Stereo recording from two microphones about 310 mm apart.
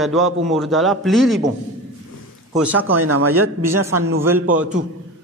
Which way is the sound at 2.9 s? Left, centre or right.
Right.